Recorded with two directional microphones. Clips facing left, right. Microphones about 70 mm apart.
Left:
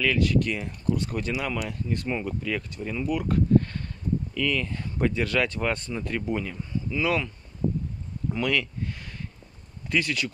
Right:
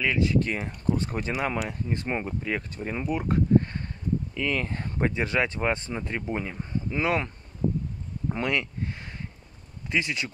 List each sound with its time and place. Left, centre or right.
0.0 s speech: right
1.7 s speech: right
8.3 s a sound: right
9.8 s speech: right